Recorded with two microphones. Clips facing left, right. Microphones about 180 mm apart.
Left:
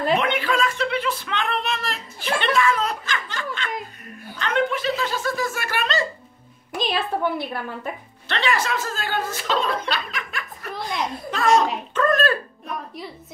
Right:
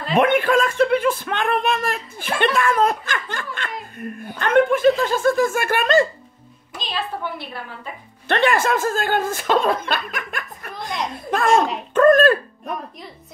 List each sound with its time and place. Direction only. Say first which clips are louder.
0.1 s a woman's voice: right 8 dB; 50° right (ahead or behind)
6.7 s a woman's voice: left 4 dB; 55° left (ahead or behind)
8.3 s a woman's voice: right 6 dB; 50° right (ahead or behind)
10.7 s a child's voice: even; centre (ahead or behind)
11.2 s a woman's voice: right 2 dB; 55° right (ahead or behind)